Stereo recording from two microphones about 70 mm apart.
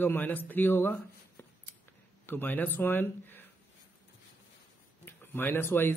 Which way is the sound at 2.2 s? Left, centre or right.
Left.